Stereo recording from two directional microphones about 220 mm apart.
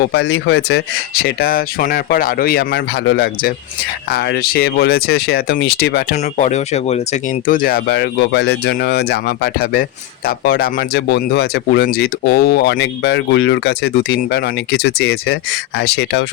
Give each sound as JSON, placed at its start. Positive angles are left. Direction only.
{"t": 0.1, "sound": "speech", "side_deg": 50}